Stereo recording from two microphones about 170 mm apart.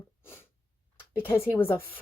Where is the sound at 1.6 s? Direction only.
10° left (ahead or behind).